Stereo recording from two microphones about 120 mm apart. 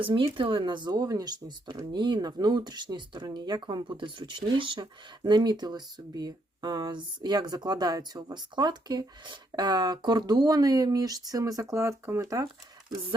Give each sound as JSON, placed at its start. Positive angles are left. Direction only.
{"t": 0.0, "sound": "speech", "side_deg": -45}